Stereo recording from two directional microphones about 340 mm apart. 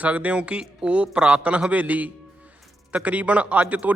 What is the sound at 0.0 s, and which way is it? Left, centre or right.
A man's voice, centre.